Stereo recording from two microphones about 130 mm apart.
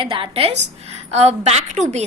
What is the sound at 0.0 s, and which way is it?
A woman's voice, 45° right (ahead or behind).